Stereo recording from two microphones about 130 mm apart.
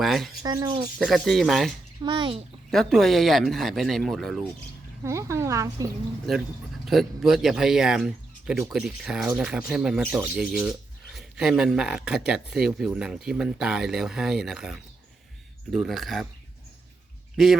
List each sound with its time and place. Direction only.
0.0 s speech: centre (ahead or behind)
0.4 s speech: 30° right (ahead or behind)
0.9 s speech: centre (ahead or behind)
2.0 s speech: 40° right (ahead or behind)
2.6 s speech: centre (ahead or behind)
5.0 s speech: 20° right (ahead or behind)
6.8 s speech: centre (ahead or behind)
17.3 s speech: centre (ahead or behind)